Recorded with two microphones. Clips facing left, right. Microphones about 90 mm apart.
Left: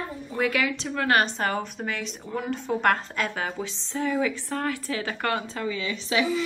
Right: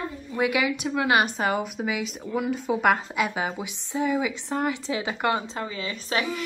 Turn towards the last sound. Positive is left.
turn(degrees=-45)  # may be behind; listen again after turning